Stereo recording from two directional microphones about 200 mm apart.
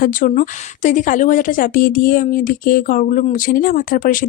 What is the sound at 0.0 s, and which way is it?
A woman's voice, 45° left (ahead or behind).